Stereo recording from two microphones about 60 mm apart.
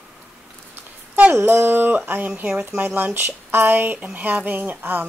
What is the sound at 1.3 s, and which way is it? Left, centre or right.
Speech, right.